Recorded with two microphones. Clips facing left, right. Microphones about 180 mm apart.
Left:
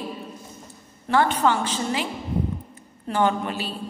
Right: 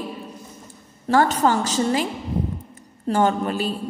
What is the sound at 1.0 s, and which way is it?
A woman's voice, 40° right (ahead or behind).